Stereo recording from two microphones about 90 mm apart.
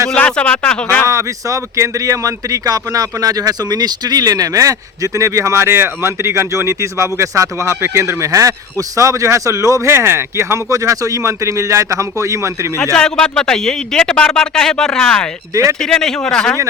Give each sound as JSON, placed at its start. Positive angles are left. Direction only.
{"t": 0.1, "sound": "a man's voice", "side_deg": 10}
{"t": 1.0, "sound": "speech", "side_deg": -35}
{"t": 12.9, "sound": "a man's voice", "side_deg": 10}